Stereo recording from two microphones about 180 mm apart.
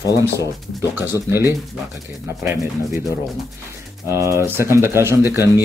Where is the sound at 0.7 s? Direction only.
10° right (ahead or behind).